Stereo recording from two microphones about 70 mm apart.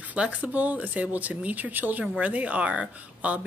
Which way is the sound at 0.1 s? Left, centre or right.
Centre.